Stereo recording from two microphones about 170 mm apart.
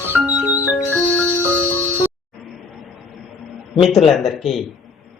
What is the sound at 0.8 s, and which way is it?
Music, 10° left (ahead or behind).